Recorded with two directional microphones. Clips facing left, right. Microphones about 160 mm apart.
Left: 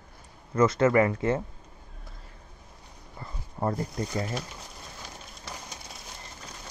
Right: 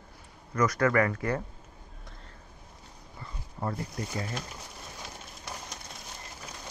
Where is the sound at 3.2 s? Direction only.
40° left (ahead or behind).